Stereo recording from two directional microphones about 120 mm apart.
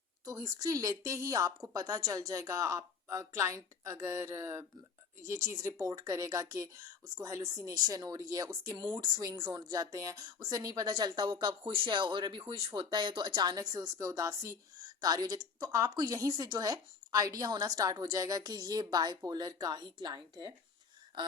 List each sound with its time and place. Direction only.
0.3 s a woman's voice: 30° right (ahead or behind)